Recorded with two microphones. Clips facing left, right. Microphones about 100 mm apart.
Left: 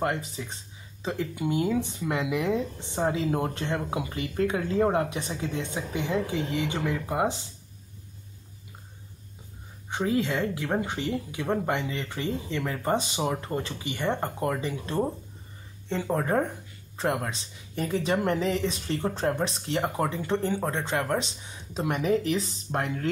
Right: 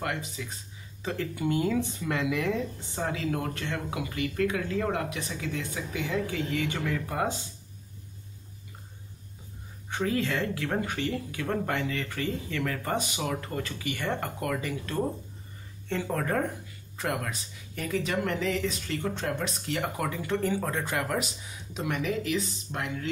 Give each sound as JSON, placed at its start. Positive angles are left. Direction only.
{"t": 0.4, "sound": "speech", "side_deg": 30}
{"t": 1.0, "sound": "speech", "side_deg": 15}
{"t": 9.8, "sound": "speech", "side_deg": 20}